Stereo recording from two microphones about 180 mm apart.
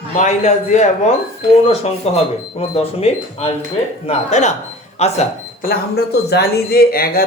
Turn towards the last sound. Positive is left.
turn(degrees=55)  # may be behind; listen again after turning